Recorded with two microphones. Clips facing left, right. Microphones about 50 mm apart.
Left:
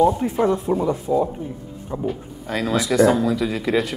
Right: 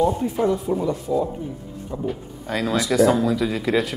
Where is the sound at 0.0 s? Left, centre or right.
Centre.